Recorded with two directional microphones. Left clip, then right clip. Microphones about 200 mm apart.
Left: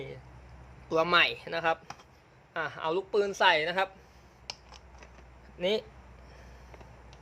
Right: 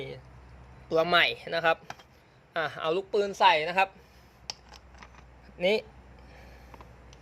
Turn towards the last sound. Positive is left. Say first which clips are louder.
# right 3 dB
turn(degrees=-10)  # may be behind; listen again after turning